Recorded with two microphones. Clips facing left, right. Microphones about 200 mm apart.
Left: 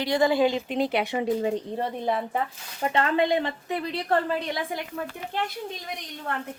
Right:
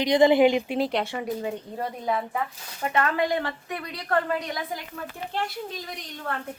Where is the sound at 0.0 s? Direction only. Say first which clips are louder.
Right 4 dB; 20° right (ahead or behind).